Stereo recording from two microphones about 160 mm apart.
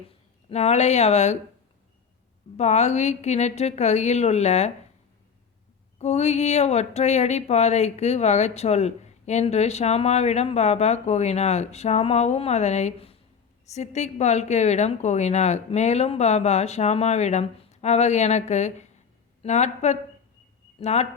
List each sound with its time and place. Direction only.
0.5 s speech: 45° left (ahead or behind)
2.6 s speech: 45° left (ahead or behind)
6.0 s a woman's voice: 45° left (ahead or behind)